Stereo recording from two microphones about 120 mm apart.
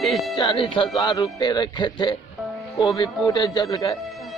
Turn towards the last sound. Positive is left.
turn(degrees=35)  # may be behind; listen again after turning